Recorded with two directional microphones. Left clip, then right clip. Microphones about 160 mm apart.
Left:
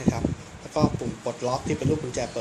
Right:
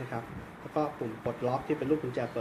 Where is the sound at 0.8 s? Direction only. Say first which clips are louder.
Left 6 dB; 15° left (ahead or behind).